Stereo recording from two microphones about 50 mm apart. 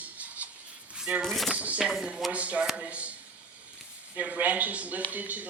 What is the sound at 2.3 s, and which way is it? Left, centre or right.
Speech, right.